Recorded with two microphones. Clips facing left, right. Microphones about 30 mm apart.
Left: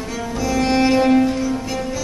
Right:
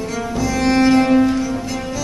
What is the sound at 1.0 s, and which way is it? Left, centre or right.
Music, centre.